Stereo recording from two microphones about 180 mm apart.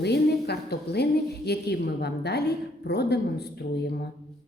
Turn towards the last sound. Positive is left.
turn(degrees=65)  # may be behind; listen again after turning